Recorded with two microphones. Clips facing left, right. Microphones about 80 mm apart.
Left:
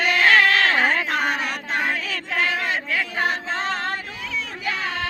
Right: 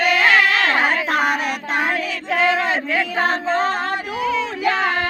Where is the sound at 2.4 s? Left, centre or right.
Right.